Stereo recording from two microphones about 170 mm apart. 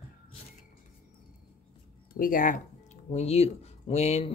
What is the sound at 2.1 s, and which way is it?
Speech, 55° left (ahead or behind).